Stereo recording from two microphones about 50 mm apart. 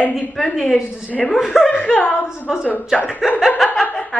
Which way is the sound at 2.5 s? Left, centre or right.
Centre.